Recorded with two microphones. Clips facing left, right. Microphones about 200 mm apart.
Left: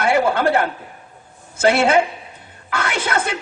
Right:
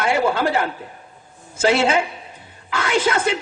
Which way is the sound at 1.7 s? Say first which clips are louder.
Left 3 dB; 60° left (ahead or behind).